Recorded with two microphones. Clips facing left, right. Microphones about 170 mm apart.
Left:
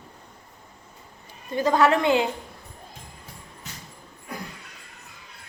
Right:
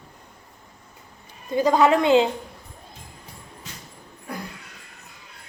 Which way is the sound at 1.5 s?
15° right (ahead or behind).